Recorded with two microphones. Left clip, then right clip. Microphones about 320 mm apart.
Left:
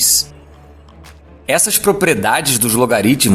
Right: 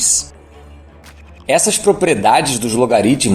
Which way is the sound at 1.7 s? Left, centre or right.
Left.